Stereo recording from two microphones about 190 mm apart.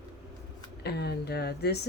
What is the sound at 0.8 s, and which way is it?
Speech, 60° left (ahead or behind).